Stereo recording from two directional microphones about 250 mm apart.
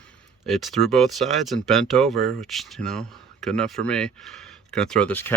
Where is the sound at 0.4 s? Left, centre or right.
Centre.